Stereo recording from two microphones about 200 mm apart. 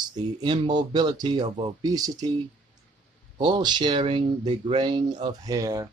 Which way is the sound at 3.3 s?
20° right (ahead or behind).